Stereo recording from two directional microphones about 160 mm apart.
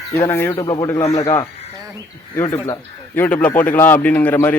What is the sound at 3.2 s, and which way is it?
A man's voice, 10° left (ahead or behind).